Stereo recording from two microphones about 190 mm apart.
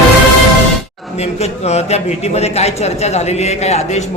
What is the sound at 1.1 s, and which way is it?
A man's voice, 35° left (ahead or behind).